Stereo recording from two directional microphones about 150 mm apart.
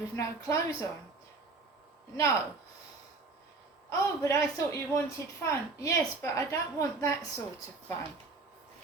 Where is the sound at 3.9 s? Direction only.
20° left (ahead or behind).